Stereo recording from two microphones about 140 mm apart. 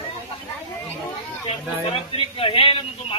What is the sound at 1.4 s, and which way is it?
A man's voice, 40° left (ahead or behind).